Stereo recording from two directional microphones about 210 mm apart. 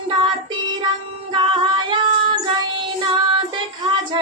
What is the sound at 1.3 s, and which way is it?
Music, 20° right (ahead or behind).